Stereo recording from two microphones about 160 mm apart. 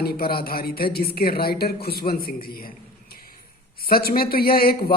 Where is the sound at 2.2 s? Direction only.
65° left (ahead or behind).